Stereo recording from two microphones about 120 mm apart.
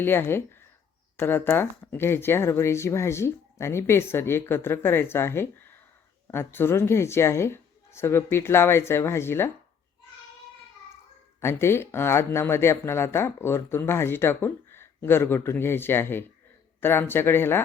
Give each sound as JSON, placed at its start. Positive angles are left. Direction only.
{"t": 0.0, "sound": "speech", "side_deg": 20}
{"t": 11.3, "sound": "speech", "side_deg": 20}